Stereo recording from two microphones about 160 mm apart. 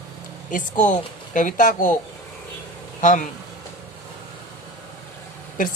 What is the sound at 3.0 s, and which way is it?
Speech, 50° left (ahead or behind).